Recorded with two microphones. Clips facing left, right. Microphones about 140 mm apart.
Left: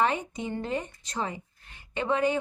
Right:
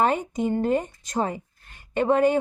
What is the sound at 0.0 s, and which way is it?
Speech, 45° right (ahead or behind).